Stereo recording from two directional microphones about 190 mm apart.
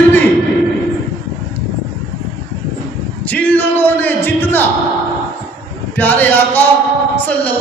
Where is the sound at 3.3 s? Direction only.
10° left (ahead or behind).